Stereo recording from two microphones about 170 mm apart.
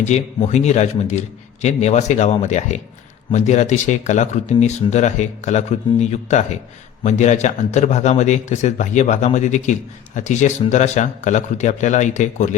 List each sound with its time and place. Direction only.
0.1 s a man's voice: 40° left (ahead or behind)